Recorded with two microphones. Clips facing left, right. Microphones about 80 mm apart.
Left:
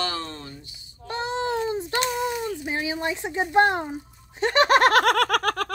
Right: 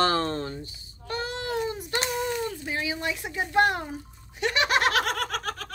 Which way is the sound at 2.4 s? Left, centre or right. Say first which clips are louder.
Left 2 dB; centre.